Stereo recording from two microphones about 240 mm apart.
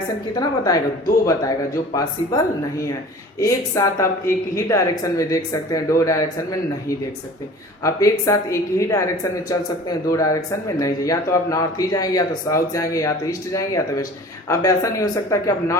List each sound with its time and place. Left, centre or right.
0.3 s speech: centre